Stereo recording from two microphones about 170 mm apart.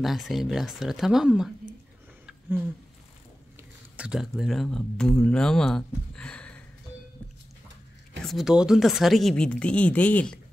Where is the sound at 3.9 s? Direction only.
5° right (ahead or behind).